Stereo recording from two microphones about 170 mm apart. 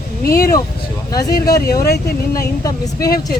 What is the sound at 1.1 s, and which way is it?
Speech, 20° left (ahead or behind).